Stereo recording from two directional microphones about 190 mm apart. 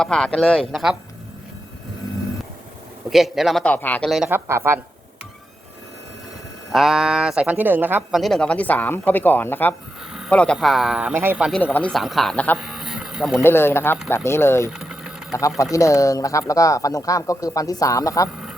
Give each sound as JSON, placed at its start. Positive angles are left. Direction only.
{"t": 0.0, "sound": "a man's voice", "side_deg": 5}
{"t": 3.1, "sound": "a man's voice", "side_deg": 0}
{"t": 4.3, "sound": "speech", "side_deg": -15}
{"t": 6.7, "sound": "a man's voice", "side_deg": 0}
{"t": 8.2, "sound": "a man's voice", "side_deg": 5}
{"t": 11.6, "sound": "a man's voice", "side_deg": 10}
{"t": 12.6, "sound": "a sound", "side_deg": 0}
{"t": 13.4, "sound": "speech", "side_deg": 10}
{"t": 14.7, "sound": "engine", "side_deg": -5}
{"t": 15.3, "sound": "speech", "side_deg": 15}